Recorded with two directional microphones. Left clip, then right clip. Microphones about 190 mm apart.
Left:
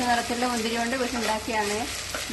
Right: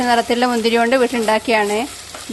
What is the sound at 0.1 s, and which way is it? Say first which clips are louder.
Speech: right 12 dB; 55° right (ahead or behind).